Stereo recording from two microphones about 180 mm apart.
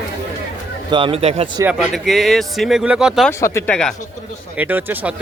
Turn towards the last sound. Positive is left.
turn(degrees=-10)  # may be behind; listen again after turning